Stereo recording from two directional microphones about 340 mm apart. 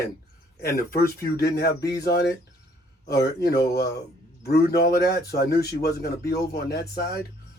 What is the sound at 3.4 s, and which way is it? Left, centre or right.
A man's voice, left.